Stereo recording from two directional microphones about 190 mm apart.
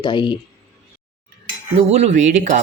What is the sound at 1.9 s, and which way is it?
Speech, 35° right (ahead or behind).